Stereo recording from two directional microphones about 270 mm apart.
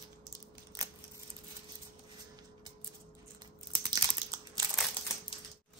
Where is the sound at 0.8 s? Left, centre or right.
Centre.